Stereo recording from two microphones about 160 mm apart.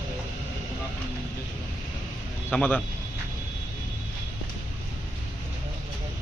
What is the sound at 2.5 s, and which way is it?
Speech, 10° left (ahead or behind).